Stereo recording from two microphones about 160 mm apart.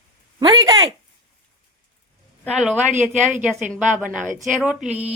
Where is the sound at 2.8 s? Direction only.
50° right (ahead or behind).